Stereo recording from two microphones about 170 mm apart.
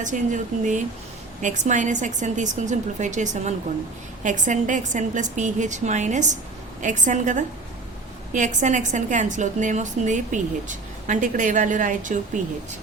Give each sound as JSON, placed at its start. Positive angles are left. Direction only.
{"t": 0.0, "sound": "a woman's voice", "side_deg": -50}